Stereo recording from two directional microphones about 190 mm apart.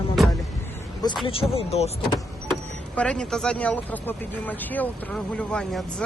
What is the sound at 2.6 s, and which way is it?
Speech, 5° left (ahead or behind).